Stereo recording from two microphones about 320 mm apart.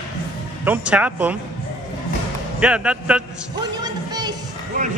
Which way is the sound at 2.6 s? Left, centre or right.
Centre.